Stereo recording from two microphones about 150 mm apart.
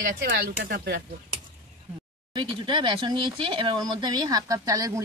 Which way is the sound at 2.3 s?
35° right (ahead or behind).